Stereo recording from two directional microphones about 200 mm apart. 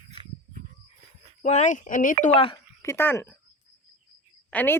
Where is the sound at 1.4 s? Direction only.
35° left (ahead or behind).